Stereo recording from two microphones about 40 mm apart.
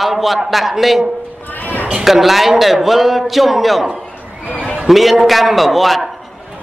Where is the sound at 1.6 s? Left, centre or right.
Left.